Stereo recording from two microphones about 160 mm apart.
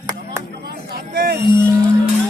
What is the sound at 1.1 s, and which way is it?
Speech, 65° right (ahead or behind).